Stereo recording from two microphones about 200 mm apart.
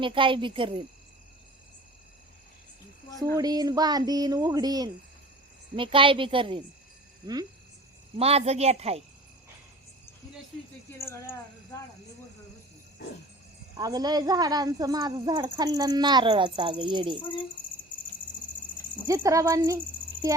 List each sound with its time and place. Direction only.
0.0 s a woman's voice: 25° right (ahead or behind)
3.3 s a woman's voice: 20° right (ahead or behind)
8.1 s speech: 30° right (ahead or behind)
10.9 s a sound: 15° left (ahead or behind)
13.7 s a woman's voice: 20° right (ahead or behind)
17.2 s a sound: 25° left (ahead or behind)
19.0 s speech: 15° right (ahead or behind)